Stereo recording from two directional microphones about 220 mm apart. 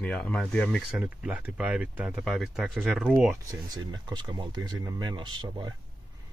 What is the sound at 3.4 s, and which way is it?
Speech, 15° right (ahead or behind).